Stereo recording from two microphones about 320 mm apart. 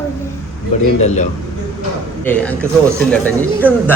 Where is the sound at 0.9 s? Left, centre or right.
Left.